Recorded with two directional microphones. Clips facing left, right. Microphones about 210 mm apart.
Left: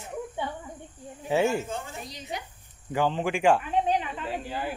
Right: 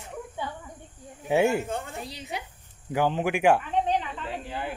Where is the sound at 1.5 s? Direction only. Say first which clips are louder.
Right 2 dB; 60° right (ahead or behind).